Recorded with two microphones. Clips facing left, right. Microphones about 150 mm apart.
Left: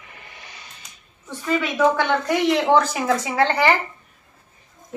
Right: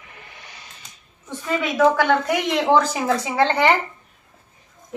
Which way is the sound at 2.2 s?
15° right (ahead or behind).